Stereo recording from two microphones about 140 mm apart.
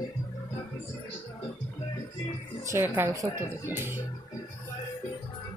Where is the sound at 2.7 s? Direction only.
15° right (ahead or behind).